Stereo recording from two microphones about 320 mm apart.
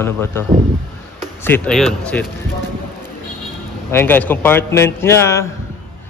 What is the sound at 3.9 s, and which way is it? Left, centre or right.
A man's voice, centre.